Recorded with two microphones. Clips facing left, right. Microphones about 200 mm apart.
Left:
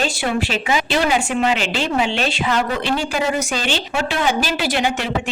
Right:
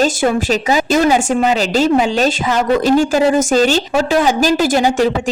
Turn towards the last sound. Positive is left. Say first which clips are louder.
# right 8 dB
turn(degrees=-40)  # may be behind; listen again after turning